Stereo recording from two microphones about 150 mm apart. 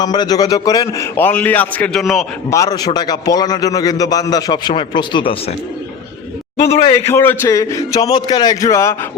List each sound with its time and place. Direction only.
0.0 s a man's voice: 25° left (ahead or behind); by 2.2 s centre (ahead or behind)
2.5 s a man's voice: 25° left (ahead or behind)
6.6 s speech: 40° left (ahead or behind)
7.1 s a man's voice: 15° left (ahead or behind)